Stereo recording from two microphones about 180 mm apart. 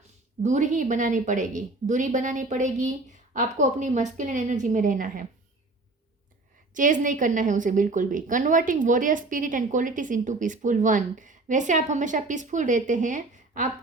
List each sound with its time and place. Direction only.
0.4 s a woman's voice: 40° right (ahead or behind)
6.7 s a woman's voice: 45° right (ahead or behind)